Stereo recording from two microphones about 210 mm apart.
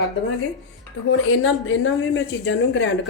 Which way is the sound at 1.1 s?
70° left (ahead or behind).